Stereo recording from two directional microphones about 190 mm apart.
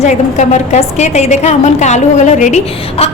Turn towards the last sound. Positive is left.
turn(degrees=35)  # may be behind; listen again after turning